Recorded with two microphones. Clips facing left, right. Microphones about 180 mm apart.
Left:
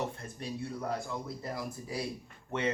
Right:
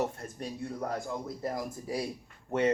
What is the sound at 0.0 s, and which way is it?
Speech, 45° right (ahead or behind).